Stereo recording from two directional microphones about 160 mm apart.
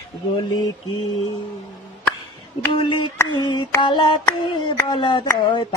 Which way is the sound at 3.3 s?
30° left (ahead or behind).